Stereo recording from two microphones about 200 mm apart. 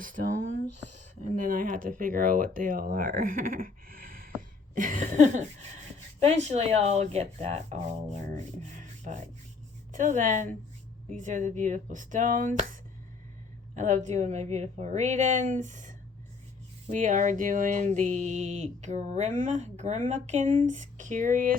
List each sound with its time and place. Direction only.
0.0 s a sound: 40° right (ahead or behind)
0.9 s speech: 40° right (ahead or behind)
13.7 s speech: 35° right (ahead or behind)